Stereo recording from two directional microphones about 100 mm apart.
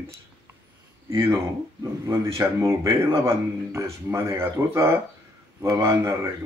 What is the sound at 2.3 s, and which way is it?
Speech, 30° right (ahead or behind).